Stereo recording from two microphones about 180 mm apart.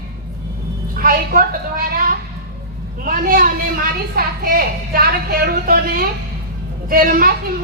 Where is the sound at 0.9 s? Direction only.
50° right (ahead or behind).